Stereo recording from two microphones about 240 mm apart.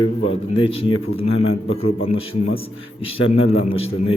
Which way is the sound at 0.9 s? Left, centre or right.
Left.